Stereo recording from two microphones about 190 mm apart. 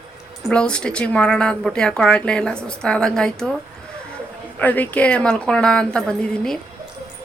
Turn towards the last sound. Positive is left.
turn(degrees=5)  # may be behind; listen again after turning